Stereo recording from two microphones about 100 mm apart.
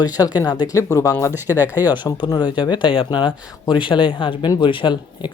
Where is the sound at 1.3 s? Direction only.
20° right (ahead or behind).